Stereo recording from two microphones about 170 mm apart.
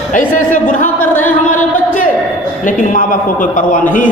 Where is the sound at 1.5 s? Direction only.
50° left (ahead or behind).